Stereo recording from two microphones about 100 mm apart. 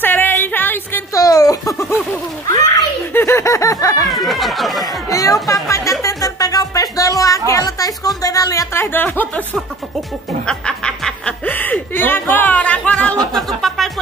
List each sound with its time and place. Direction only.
0.0 s music: 20° left (ahead or behind)
1.1 s baby laughter: 35° left (ahead or behind)
3.2 s a sound: 25° left (ahead or behind)
4.0 s chatter: centre (ahead or behind)
5.1 s music: 35° left (ahead or behind)
8.7 s music: 20° left (ahead or behind)
11.1 s chuckle: 15° left (ahead or behind)